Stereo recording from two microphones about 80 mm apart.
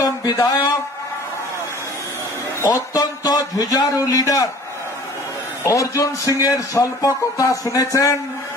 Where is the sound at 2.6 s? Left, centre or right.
Left.